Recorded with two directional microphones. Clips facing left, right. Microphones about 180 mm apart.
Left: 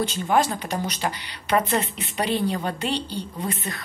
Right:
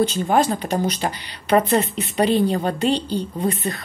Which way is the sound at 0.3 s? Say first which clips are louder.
Right 3 dB; 35° right (ahead or behind).